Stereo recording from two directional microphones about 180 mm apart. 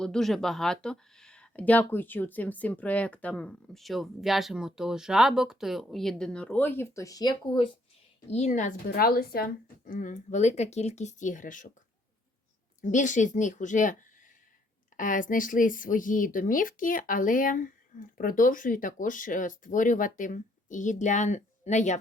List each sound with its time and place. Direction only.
0.0 s speech: centre (ahead or behind); by 7.7 s 25° left (ahead or behind)
8.3 s speech: 40° left (ahead or behind)
12.8 s speech: 45° left (ahead or behind)
14.9 s speech: 45° left (ahead or behind)